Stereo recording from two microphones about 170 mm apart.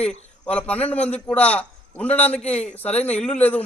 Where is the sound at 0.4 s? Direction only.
10° left (ahead or behind).